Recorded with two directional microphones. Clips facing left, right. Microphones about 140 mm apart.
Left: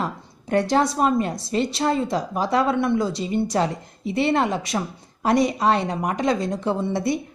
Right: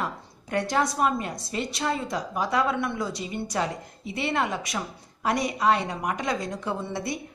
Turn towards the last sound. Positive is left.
turn(degrees=30)  # may be behind; listen again after turning